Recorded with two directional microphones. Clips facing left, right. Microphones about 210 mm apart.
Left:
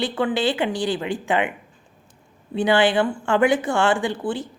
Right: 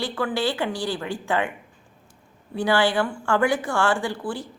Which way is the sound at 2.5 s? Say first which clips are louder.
Left 3 dB; 20° left (ahead or behind).